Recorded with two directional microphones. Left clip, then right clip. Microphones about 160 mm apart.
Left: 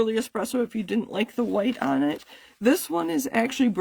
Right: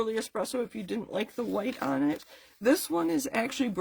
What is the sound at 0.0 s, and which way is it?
Speech, 55° left (ahead or behind).